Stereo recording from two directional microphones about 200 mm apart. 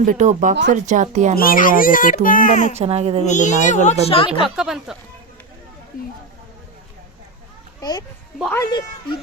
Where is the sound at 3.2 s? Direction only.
40° left (ahead or behind).